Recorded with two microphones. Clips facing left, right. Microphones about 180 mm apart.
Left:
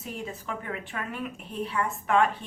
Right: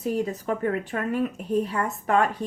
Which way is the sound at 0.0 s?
40° right (ahead or behind).